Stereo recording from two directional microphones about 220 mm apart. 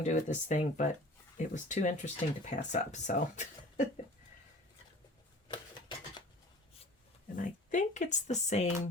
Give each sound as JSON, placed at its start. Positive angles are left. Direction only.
{"t": 0.1, "sound": "speech", "side_deg": 35}
{"t": 7.3, "sound": "speech", "side_deg": 35}